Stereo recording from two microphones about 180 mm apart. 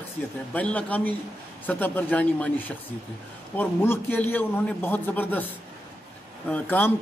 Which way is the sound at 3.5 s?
10° left (ahead or behind).